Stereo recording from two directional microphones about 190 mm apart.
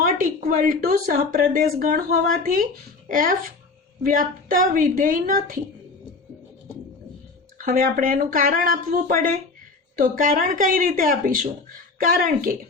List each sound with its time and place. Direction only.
0.0 s a woman's voice: 45° right (ahead or behind)
7.6 s a woman's voice: 45° right (ahead or behind)